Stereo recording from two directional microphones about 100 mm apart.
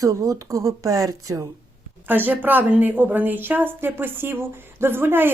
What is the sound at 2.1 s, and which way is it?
Speech, 20° right (ahead or behind).